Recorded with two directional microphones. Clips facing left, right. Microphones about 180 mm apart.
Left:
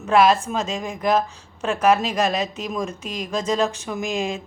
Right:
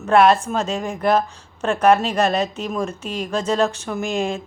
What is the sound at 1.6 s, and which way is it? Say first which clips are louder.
A woman's voice: right 3 dB; 5° left (ahead or behind).